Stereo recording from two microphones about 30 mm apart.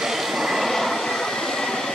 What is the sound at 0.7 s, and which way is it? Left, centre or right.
Vehicle, centre.